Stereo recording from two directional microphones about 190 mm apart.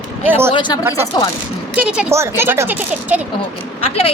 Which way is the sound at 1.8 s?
5° right (ahead or behind).